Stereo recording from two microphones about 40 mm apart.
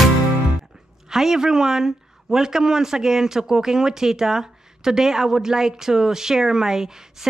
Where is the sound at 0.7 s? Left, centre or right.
Centre.